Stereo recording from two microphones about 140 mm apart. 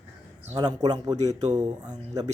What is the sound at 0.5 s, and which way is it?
Speech, 30° right (ahead or behind).